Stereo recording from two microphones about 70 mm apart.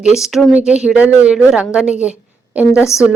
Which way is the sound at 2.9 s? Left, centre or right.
Left.